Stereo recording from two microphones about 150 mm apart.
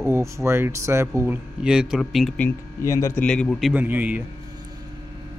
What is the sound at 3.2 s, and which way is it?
Speech, 5° left (ahead or behind).